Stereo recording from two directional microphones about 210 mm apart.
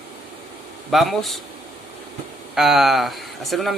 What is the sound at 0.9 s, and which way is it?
Speech, centre (ahead or behind).